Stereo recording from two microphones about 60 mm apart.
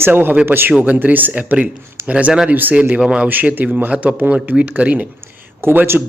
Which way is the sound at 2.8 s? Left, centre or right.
Centre.